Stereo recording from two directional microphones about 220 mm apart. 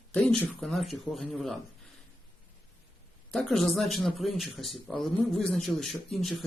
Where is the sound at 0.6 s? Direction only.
Centre (ahead or behind).